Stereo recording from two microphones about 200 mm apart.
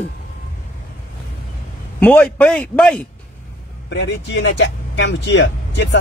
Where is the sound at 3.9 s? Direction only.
60° left (ahead or behind).